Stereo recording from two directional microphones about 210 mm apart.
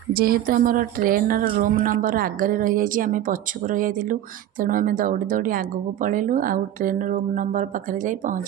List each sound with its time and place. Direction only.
0.1 s a woman's voice: 45° right (ahead or behind)